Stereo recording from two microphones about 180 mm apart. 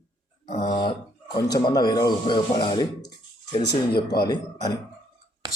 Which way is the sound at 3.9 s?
60° left (ahead or behind).